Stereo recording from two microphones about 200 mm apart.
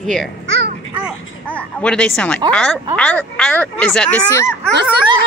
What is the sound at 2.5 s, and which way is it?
Speech, 5° left (ahead or behind).